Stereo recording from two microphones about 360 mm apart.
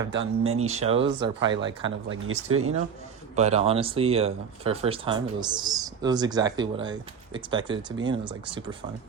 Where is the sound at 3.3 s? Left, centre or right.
Centre.